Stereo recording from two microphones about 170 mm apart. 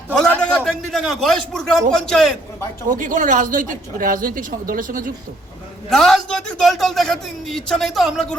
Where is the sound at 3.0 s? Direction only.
50° right (ahead or behind).